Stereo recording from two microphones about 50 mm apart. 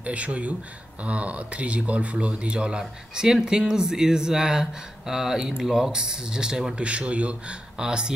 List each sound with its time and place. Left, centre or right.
0.0 s speech: right
6.8 s speech: right